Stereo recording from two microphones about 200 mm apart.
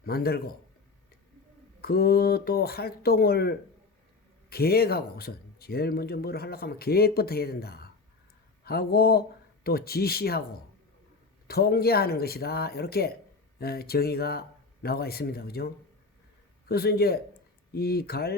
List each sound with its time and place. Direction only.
0.0 s speech: 50° left (ahead or behind)
1.8 s speech: 50° left (ahead or behind)
11.4 s speech: 50° left (ahead or behind)